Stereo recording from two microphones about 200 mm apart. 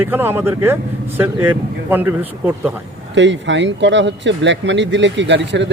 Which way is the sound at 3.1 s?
65° right (ahead or behind).